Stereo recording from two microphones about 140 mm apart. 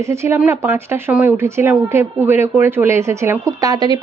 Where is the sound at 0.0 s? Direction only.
20° right (ahead or behind).